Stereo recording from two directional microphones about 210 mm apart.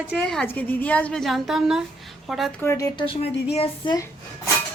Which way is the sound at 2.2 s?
Centre (ahead or behind).